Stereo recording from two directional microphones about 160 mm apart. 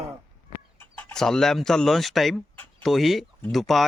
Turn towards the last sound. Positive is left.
turn(degrees=0)  # may be behind; listen again after turning